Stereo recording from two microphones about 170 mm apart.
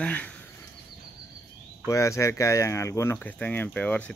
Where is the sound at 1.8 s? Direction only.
15° left (ahead or behind).